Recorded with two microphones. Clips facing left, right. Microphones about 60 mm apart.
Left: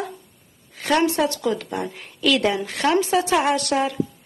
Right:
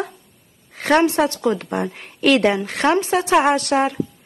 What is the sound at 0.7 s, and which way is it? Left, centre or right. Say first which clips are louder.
Speech: right 4 dB; right.